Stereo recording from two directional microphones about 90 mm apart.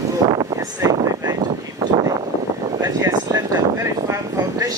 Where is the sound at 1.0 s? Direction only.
40° right (ahead or behind).